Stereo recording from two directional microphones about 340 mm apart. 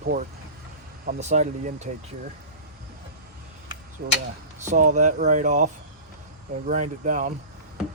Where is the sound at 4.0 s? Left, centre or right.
Right.